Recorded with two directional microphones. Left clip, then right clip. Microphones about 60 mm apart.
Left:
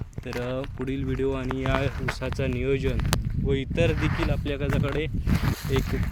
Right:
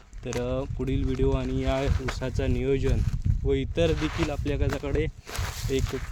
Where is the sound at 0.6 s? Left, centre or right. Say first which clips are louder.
Even; right.